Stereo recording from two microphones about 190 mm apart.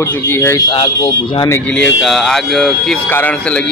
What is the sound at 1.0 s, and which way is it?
Speech, 30° left (ahead or behind).